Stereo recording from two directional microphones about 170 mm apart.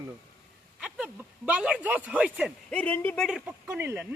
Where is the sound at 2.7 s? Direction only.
10° left (ahead or behind).